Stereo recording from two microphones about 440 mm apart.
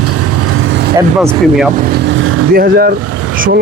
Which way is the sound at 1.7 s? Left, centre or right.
Right.